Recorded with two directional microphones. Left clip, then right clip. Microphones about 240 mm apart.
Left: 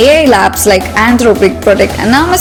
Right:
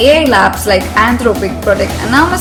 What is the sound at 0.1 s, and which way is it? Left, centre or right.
A woman's voice, left.